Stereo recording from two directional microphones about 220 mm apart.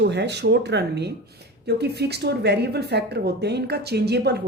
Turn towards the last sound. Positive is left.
turn(degrees=-50)  # may be behind; listen again after turning